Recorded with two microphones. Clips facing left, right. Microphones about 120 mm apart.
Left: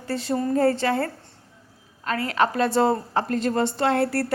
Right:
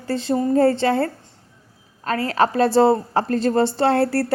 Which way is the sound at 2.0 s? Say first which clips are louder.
Right 3 dB; 35° right (ahead or behind).